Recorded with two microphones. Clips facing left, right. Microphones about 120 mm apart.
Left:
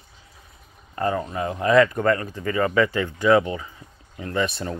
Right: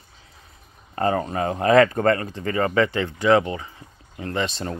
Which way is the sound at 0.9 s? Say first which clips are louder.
Right 2 dB; 50° right (ahead or behind).